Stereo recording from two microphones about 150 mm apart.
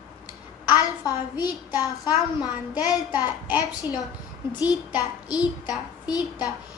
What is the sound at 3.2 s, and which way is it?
Speech, 10° right (ahead or behind).